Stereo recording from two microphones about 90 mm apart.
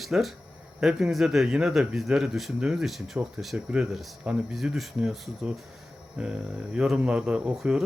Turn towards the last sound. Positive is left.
turn(degrees=-5)  # may be behind; listen again after turning